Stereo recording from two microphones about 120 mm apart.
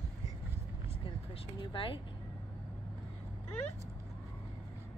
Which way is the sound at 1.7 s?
50° left (ahead or behind).